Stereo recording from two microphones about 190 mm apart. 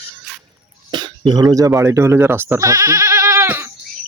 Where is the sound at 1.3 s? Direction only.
20° right (ahead or behind).